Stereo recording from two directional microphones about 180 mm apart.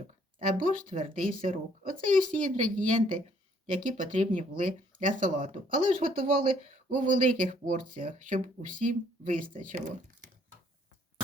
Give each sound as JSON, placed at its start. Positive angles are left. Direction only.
{"t": 0.4, "sound": "speech", "side_deg": -50}